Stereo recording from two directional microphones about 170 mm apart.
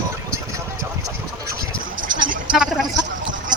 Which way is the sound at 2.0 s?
90° right.